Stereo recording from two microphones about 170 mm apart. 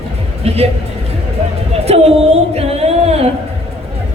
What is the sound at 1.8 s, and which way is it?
Singing, 35° right (ahead or behind).